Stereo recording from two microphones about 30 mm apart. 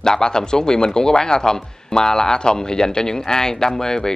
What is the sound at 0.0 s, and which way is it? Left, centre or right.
Speech, left.